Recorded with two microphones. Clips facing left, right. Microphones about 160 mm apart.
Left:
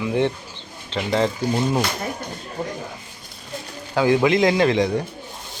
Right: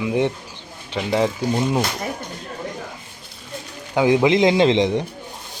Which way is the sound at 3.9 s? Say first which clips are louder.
Right 1 dB; 20° right (ahead or behind).